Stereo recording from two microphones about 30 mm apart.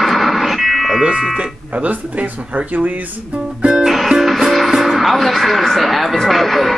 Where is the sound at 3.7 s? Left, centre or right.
Centre.